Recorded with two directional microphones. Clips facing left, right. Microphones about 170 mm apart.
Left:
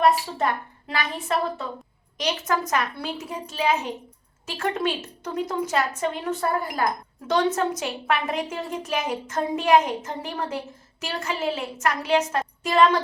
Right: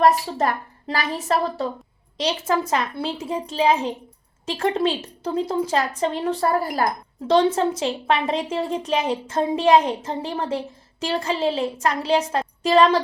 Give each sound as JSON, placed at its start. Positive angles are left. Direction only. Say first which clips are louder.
{"t": 0.0, "sound": "a woman's voice", "louder": "right 3 dB", "side_deg": -40}